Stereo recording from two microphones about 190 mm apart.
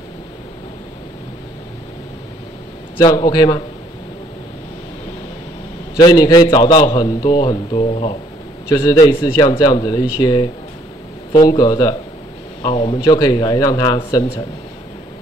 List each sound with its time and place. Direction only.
3.0 s a man's voice: 20° left (ahead or behind)
5.9 s a man's voice: 25° left (ahead or behind)
8.6 s a man's voice: 15° left (ahead or behind)